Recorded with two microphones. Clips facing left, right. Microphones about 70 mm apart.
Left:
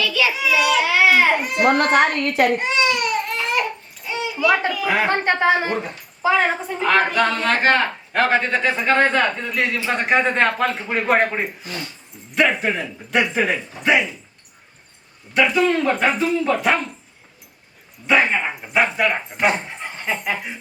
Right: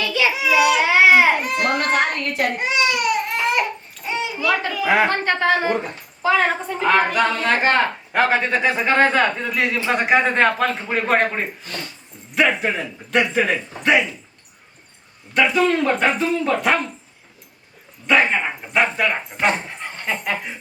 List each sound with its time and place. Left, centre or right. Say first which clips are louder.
0.0 s a sound: even; right
0.5 s a sound: right 2 dB; centre
1.4 s speech: left 3 dB; centre
1.7 s a woman's voice: left 4 dB; left
2.6 s baby cry: even; centre
4.0 s babbling: right 1 dB; right
4.4 s speech: left 4 dB; centre
4.7 s speech: right 3 dB; right
5.2 s speech: left 1 dB; left
6.2 s speech: even; centre
6.8 s a sound: even; centre
7.6 s speech: even; centre
15.3 s speech: even; centre
18.0 s speech: even; centre